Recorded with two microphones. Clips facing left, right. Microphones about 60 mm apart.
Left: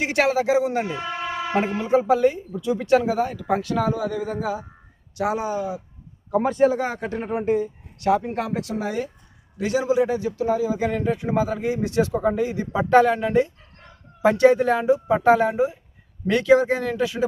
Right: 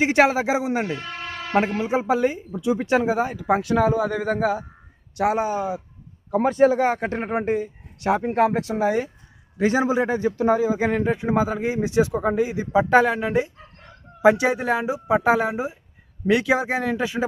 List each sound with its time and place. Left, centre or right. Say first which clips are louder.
0.0 s a man's voice: right 2 dB; right
0.9 s vehicle: left 5 dB; centre
1.8 s a man's voice: left 3 dB; centre
4.1 s speech: right 4 dB; right
6.5 s speech: right 2 dB; centre
6.7 s a man's voice: right 4 dB; right